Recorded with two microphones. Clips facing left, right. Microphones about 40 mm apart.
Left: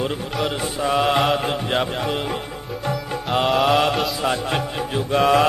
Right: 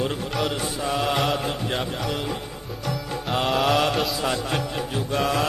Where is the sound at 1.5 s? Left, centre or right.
Left.